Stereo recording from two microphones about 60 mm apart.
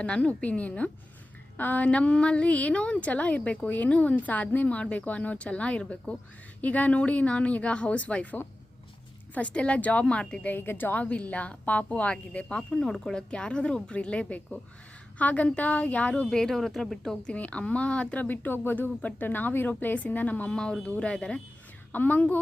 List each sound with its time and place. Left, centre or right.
0.0 s a woman's voice: centre
10.5 s speech: left
11.0 s a woman's voice: left
16.3 s speech: centre
17.3 s a woman's voice: left
21.9 s a woman's voice: left